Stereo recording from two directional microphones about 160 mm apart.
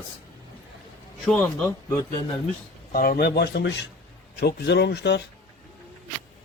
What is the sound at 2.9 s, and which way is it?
Speech, 65° left (ahead or behind).